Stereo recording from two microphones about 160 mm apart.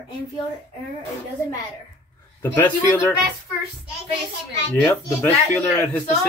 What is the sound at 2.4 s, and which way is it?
Speech, 15° left (ahead or behind).